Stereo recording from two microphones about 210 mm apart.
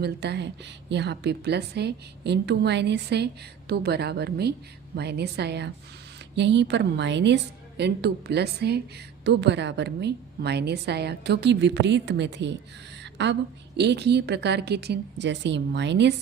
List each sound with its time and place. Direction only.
0.0 s a woman's voice: 50° right (ahead or behind)
13.0 s a sound: 55° right (ahead or behind)
13.7 s a woman's voice: 55° right (ahead or behind)